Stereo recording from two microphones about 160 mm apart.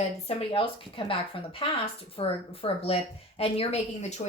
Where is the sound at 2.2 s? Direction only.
35° left (ahead or behind).